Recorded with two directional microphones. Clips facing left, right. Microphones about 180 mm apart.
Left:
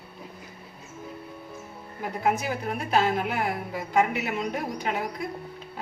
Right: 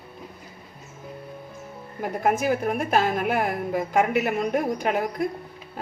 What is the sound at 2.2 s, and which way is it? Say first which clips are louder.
A woman's voice: right 4 dB; 50° right (ahead or behind).